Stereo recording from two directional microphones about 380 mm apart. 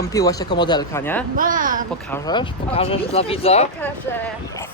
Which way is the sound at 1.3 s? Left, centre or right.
Right.